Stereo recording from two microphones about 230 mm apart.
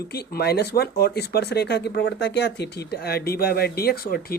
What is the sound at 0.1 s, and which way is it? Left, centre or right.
Speech, left.